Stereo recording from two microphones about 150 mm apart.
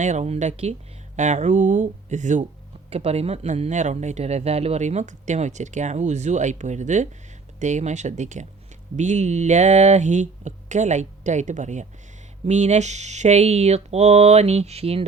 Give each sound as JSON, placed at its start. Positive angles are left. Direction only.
{"t": 0.0, "sound": "speech", "side_deg": -50}
{"t": 2.9, "sound": "speech", "side_deg": -45}